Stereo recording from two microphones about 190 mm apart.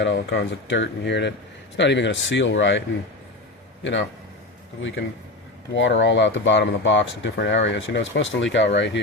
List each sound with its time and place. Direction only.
0.0 s speech: 70° left (ahead or behind)
4.8 s speech: 75° left (ahead or behind)